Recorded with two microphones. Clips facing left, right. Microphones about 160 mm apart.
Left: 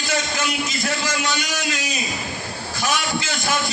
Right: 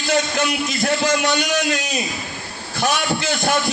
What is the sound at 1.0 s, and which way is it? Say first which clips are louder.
A man's voice: right 6 dB; 60° right (ahead or behind).